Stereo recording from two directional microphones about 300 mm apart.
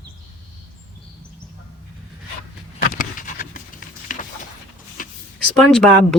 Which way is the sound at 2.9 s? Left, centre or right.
Left.